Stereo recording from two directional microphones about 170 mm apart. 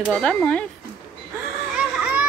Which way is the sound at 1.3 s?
5° right (ahead or behind).